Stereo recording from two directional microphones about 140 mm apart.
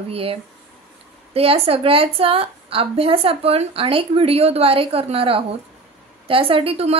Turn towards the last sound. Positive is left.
turn(degrees=-45)  # may be behind; listen again after turning